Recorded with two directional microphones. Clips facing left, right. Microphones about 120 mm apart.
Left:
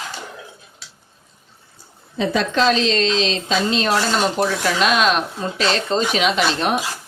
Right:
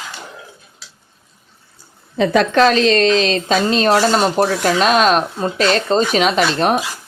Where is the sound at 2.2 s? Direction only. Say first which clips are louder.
Right 6 dB; 60° right (ahead or behind).